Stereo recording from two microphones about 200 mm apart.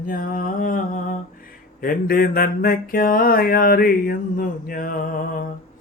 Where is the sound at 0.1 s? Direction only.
45° left (ahead or behind).